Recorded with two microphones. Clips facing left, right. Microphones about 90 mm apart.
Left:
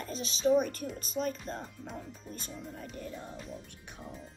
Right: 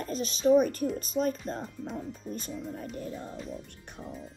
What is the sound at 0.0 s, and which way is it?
Speech, 45° right (ahead or behind).